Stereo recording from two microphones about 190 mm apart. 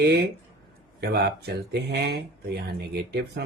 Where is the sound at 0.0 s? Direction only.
60° right (ahead or behind).